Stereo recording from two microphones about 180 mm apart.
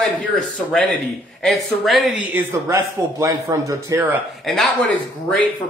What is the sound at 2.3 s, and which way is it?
A man's voice, 15° right (ahead or behind).